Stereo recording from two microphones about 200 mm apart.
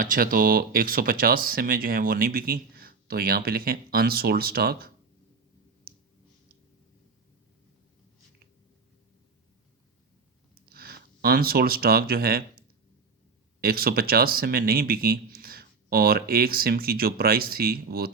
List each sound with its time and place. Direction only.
0.0 s speech: 45° right (ahead or behind)
10.5 s speech: 50° right (ahead or behind)